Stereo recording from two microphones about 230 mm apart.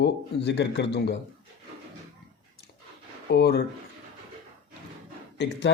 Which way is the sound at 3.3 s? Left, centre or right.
Left.